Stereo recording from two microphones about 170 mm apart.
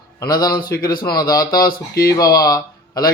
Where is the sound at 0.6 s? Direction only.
60° left (ahead or behind).